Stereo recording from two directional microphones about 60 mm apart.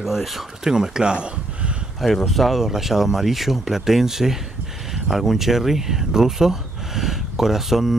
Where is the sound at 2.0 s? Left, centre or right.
Centre.